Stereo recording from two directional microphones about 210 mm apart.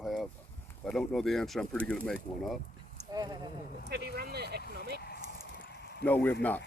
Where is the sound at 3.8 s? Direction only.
50° right (ahead or behind).